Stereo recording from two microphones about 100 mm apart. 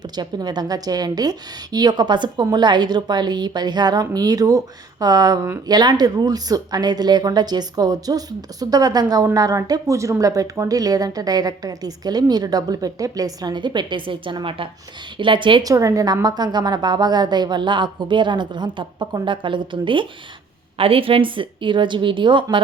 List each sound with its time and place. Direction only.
0.2 s a woman's voice: 45° right (ahead or behind)
15.6 s a woman's voice: 35° right (ahead or behind); by 20.1 s 55° right (ahead or behind)
20.7 s a woman's voice: 70° right (ahead or behind)